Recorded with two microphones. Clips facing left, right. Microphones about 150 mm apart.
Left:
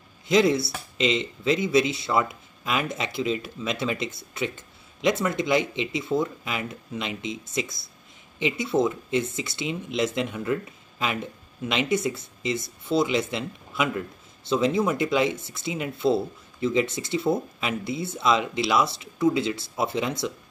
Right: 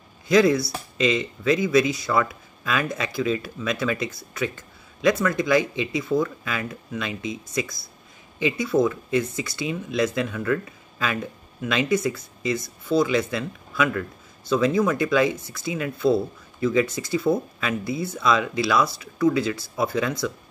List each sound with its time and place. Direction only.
0.3 s speech: 25° left (ahead or behind)